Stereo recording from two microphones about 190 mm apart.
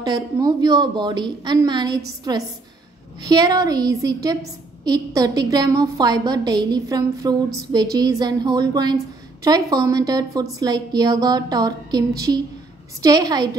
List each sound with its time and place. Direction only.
0.0 s a woman's voice: 20° right (ahead or behind)
13.0 s a woman's voice: 20° right (ahead or behind)